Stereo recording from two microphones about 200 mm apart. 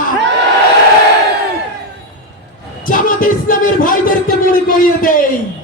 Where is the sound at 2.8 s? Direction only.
45° left (ahead or behind).